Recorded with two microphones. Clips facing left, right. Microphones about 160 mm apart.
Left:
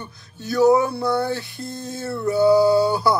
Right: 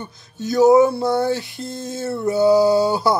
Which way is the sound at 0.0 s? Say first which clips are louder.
Right 6 dB; 20° right (ahead or behind).